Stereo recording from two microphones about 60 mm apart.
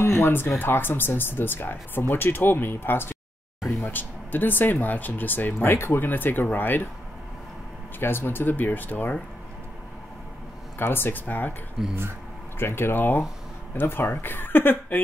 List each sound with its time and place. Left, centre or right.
0.0 s speech: left
8.0 s speech: left
10.8 s speech: left
11.8 s speech: centre
12.5 s speech: left